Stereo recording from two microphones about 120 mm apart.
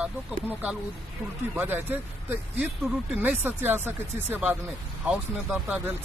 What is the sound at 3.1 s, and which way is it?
Speech, 15° right (ahead or behind).